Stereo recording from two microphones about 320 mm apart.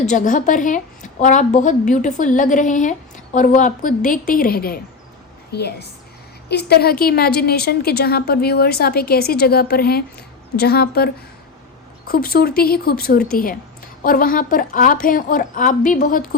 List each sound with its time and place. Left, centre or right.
0.1 s a woman's voice: left